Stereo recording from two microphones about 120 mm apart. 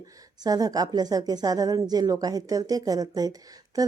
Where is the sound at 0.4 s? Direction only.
30° right (ahead or behind).